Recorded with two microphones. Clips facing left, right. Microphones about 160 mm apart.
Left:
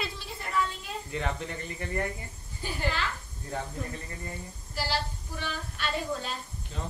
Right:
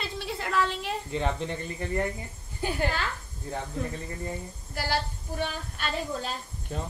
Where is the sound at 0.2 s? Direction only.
90° right.